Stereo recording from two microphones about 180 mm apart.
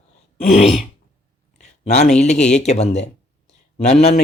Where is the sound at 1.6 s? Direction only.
40° left (ahead or behind).